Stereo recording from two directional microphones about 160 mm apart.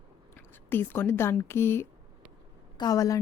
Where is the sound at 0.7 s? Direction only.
15° left (ahead or behind).